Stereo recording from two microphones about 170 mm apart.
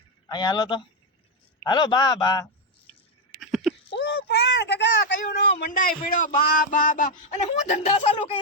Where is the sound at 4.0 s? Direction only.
75° left (ahead or behind).